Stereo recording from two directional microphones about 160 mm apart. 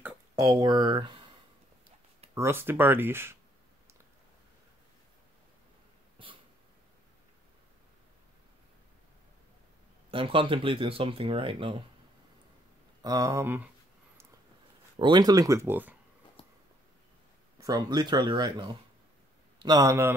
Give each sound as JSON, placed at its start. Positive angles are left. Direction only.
{"t": 0.5, "sound": "speech", "side_deg": -25}
{"t": 2.3, "sound": "speech", "side_deg": -15}
{"t": 6.1, "sound": "cat", "side_deg": -35}
{"t": 10.1, "sound": "speech", "side_deg": -35}
{"t": 13.0, "sound": "speech", "side_deg": -20}
{"t": 15.0, "sound": "speech", "side_deg": -25}
{"t": 17.6, "sound": "speech", "side_deg": -25}